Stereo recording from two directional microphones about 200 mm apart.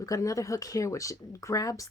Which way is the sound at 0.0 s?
15° left (ahead or behind).